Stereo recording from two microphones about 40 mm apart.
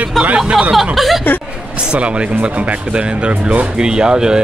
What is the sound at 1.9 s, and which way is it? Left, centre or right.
Speech, right.